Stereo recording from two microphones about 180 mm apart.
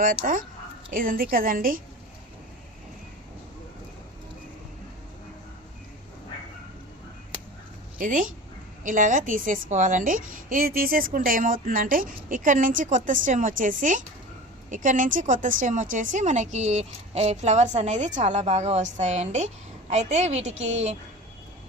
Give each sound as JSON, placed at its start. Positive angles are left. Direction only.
{"t": 0.2, "sound": "a woman's voice", "side_deg": -45}
{"t": 7.9, "sound": "a woman's voice", "side_deg": -45}